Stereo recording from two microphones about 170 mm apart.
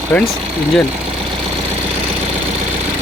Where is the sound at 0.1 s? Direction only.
10° left (ahead or behind).